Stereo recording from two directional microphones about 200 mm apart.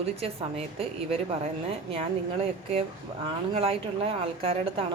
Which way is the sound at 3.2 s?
30° right (ahead or behind).